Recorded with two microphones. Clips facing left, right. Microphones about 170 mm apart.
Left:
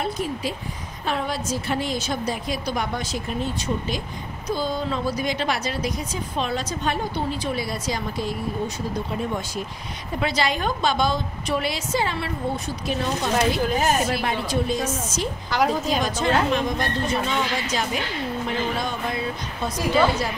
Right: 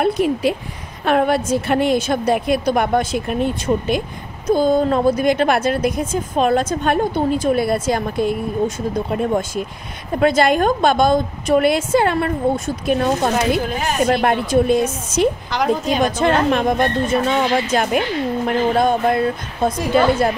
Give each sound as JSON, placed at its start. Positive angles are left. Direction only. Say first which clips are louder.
{"t": 0.0, "sound": "a woman's voice", "louder": "right 10 dB", "side_deg": -65}
{"t": 15.5, "sound": "a woman's voice", "louder": "right 3 dB", "side_deg": 0}
{"t": 16.0, "sound": "a woman's voice", "louder": "right 6 dB", "side_deg": -60}